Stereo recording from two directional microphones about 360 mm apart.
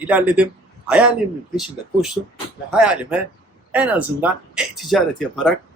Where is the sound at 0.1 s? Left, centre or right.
Centre.